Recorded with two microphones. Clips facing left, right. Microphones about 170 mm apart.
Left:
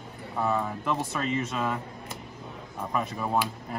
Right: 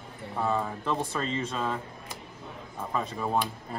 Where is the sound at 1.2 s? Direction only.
10° left (ahead or behind).